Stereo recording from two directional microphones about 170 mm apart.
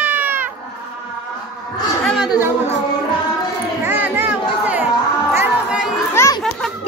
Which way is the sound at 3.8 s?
10° right (ahead or behind).